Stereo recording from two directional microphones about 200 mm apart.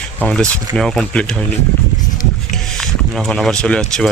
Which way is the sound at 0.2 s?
5° left (ahead or behind).